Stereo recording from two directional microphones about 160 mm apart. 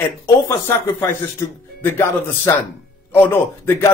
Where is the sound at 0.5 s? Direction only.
15° left (ahead or behind).